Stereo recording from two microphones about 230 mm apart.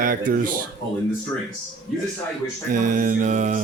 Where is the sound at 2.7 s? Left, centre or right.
Right.